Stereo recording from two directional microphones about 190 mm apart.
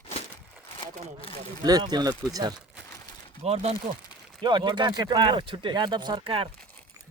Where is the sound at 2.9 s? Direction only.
25° left (ahead or behind).